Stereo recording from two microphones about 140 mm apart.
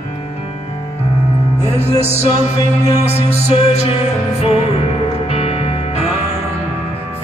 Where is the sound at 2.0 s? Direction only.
50° left (ahead or behind).